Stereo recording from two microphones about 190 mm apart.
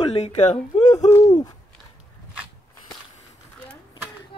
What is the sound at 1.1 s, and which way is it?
Hoot, 20° left (ahead or behind).